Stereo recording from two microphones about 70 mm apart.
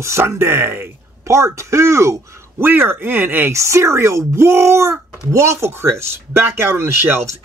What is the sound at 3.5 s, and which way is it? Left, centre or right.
Speech, right.